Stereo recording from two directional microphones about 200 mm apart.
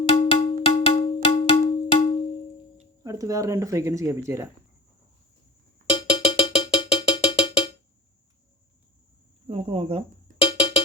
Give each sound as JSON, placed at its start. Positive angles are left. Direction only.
{"t": 0.1, "sound": "cowbell", "side_deg": 25}
{"t": 3.0, "sound": "speech", "side_deg": -20}
{"t": 5.9, "sound": "cowbell", "side_deg": 25}
{"t": 9.5, "sound": "a sound", "side_deg": -30}
{"t": 10.3, "sound": "cowbell", "side_deg": 25}